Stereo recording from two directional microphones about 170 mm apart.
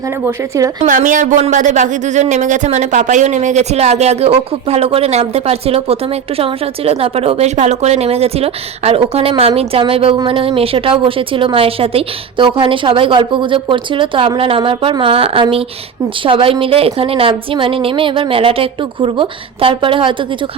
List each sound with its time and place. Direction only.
0.3 s speech: 15° right (ahead or behind)
0.9 s speech: 50° right (ahead or behind); by 20.1 s 30° right (ahead or behind)